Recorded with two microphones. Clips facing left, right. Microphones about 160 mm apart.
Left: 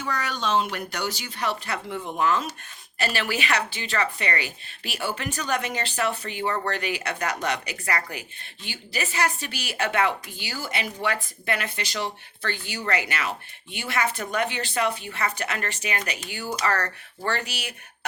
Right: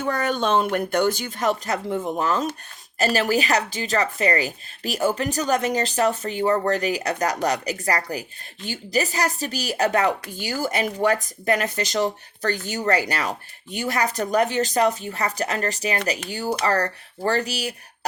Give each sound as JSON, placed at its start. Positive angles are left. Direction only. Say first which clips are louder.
{"t": 0.0, "sound": "a woman's voice", "louder": "right 6 dB", "side_deg": -50}